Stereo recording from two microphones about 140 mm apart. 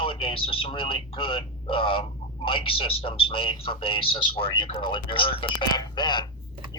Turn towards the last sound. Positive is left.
turn(degrees=30)  # may be behind; listen again after turning